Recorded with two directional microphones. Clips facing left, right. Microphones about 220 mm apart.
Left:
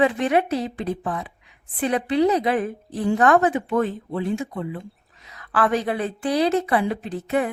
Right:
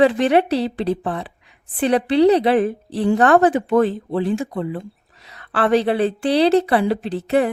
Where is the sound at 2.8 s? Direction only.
75° right (ahead or behind).